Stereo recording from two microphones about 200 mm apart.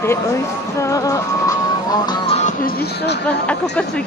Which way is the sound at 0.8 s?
15° left (ahead or behind).